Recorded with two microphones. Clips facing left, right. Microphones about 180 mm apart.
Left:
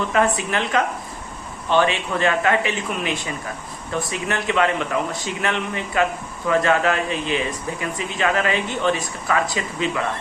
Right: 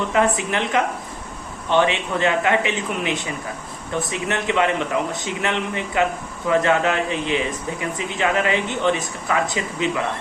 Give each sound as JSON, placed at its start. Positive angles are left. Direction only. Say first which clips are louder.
{"t": 0.1, "sound": "speech", "louder": "right 1 dB", "side_deg": -20}